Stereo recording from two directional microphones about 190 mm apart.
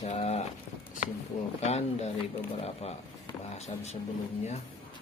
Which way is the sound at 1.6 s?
35° left (ahead or behind).